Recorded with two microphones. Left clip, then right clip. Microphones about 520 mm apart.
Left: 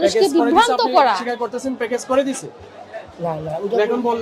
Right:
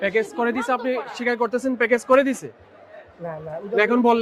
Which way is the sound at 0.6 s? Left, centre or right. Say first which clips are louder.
Left 9 dB; right.